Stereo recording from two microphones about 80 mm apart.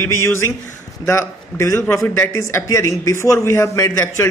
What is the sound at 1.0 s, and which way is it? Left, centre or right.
A man's voice, left.